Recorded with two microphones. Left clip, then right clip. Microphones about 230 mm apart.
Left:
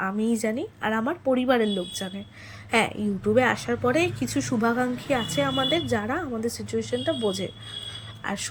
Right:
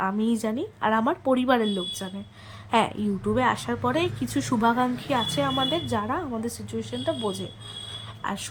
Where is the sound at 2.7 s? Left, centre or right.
Centre.